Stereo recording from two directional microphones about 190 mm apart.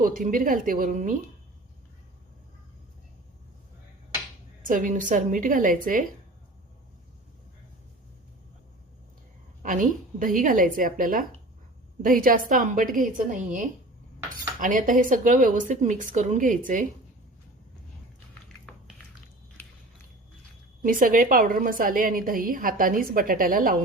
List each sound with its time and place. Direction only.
0.0 s a woman's voice: 45° right (ahead or behind)
4.6 s a woman's voice: 45° right (ahead or behind)
9.6 s a woman's voice: 45° right (ahead or behind)
18.7 s a sound: 5° left (ahead or behind)
20.8 s a woman's voice: 45° right (ahead or behind)